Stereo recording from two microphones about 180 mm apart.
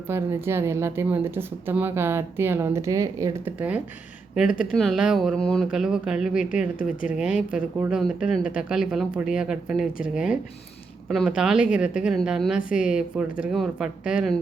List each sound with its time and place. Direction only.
0.1 s speech: 15° right (ahead or behind)
4.4 s speech: 50° left (ahead or behind)
4.7 s speech: centre (ahead or behind)